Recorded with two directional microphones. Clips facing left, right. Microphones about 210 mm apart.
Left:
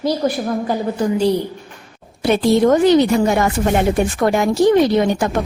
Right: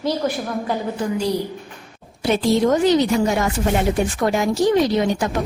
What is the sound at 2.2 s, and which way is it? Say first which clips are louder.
Speech: left 4 dB; 60° left (ahead or behind).